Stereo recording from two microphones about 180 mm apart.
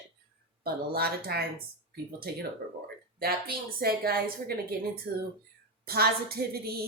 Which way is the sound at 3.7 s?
55° right (ahead or behind).